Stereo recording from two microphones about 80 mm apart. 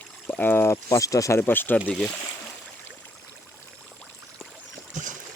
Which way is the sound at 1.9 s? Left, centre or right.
Centre.